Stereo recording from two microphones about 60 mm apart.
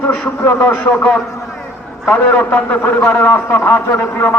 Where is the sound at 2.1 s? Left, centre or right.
Left.